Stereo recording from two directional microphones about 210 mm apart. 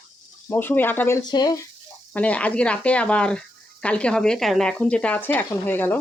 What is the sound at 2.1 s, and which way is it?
Speech, 5° left (ahead or behind).